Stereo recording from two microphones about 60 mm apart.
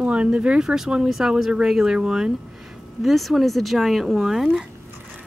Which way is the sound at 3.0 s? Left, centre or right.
Centre.